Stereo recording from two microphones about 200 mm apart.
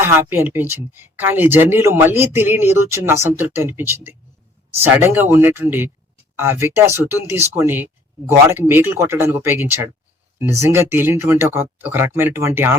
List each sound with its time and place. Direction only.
0.0 s speech: 10° right (ahead or behind)